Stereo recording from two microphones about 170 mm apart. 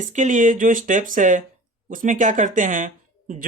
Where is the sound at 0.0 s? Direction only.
45° right (ahead or behind).